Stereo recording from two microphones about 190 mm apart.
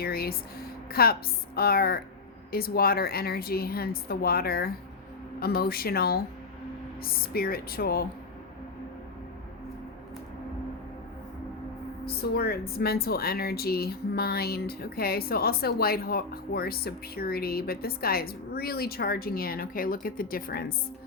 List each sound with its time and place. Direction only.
0.0 s a sound: 55° left (ahead or behind)
1.5 s speech: 55° left (ahead or behind)
12.0 s speech: 55° left (ahead or behind)